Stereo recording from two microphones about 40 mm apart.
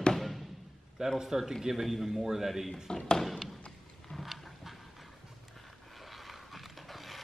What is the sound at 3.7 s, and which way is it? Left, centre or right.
Clip-clop, centre.